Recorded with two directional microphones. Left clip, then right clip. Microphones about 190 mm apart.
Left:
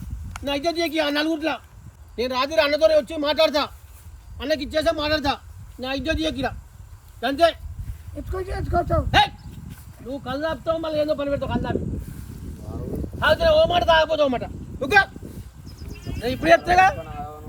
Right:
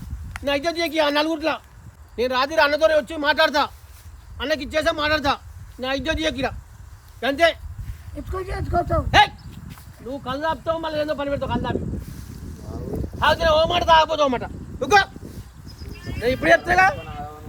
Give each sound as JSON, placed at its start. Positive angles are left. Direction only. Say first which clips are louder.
{"t": 0.4, "sound": "a man's voice", "louder": "right 1 dB", "side_deg": 0}
{"t": 8.2, "sound": "a man's voice", "louder": "even", "side_deg": 0}
{"t": 12.9, "sound": "wind", "louder": "right 1 dB", "side_deg": 0}
{"t": 13.7, "sound": "speech", "louder": "right 2 dB", "side_deg": -35}
{"t": 14.2, "sound": "a man's voice", "louder": "right 1 dB", "side_deg": -5}
{"t": 14.9, "sound": "a sound", "louder": "right 1 dB", "side_deg": -5}
{"t": 15.9, "sound": "sheep", "louder": "right 5 dB", "side_deg": -5}